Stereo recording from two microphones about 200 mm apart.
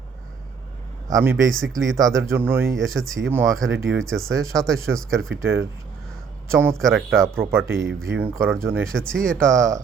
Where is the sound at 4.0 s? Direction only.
90° right.